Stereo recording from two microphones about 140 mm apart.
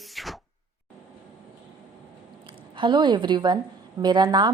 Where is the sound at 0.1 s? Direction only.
Centre (ahead or behind).